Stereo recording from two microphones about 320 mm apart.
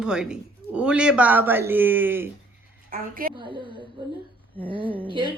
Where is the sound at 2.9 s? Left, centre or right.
Right.